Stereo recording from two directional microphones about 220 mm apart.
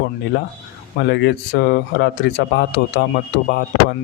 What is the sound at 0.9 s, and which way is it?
Speech, 50° left (ahead or behind).